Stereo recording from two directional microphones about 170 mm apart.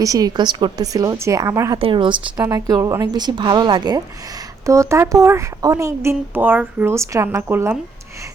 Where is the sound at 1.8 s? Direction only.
30° right (ahead or behind).